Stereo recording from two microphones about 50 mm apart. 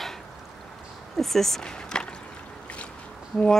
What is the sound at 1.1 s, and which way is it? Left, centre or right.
Speech, centre.